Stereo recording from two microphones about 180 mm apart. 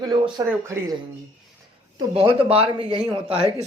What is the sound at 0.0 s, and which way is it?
Speech, 25° right (ahead or behind).